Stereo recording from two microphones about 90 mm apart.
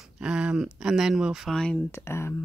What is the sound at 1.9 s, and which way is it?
Speech, 30° left (ahead or behind).